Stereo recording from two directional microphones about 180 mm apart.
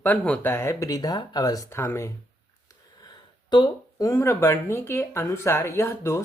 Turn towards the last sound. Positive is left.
turn(degrees=15)  # may be behind; listen again after turning